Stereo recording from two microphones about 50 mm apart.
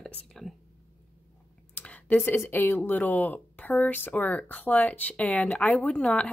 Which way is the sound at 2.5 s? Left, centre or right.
Left.